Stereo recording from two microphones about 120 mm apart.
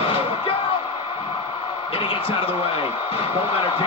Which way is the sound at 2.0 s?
50° left (ahead or behind).